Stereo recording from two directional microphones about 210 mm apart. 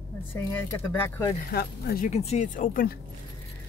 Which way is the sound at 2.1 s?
30° left (ahead or behind).